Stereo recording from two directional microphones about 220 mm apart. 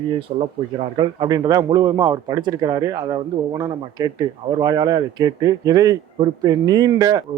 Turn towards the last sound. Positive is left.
turn(degrees=-15)  # may be behind; listen again after turning